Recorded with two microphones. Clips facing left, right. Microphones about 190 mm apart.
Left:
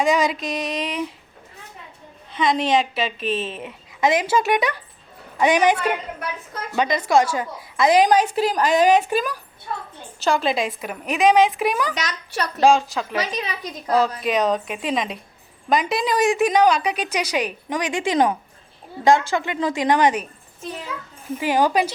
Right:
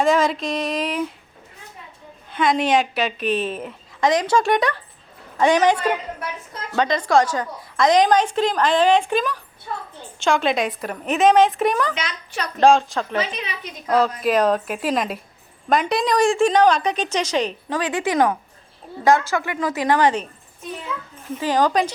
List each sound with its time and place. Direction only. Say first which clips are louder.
0.0 s a woman's voice: right 1 dB; centre (ahead or behind)
2.3 s a woman's voice: right 1 dB; centre (ahead or behind)
3.2 s a woman's voice: right 4 dB; 25° left (ahead or behind)
3.5 s a woman's voice: right 3 dB; centre (ahead or behind)
5.4 s a woman's voice: right 1 dB; 15° left (ahead or behind)
13.3 s a woman's voice: left 3 dB; 40° left (ahead or behind)
14.2 s a woman's voice: right 2 dB; centre (ahead or behind)
16.2 s a woman's voice: right 1 dB; 15° left (ahead or behind)
21.3 s a woman's voice: even; 10° left (ahead or behind)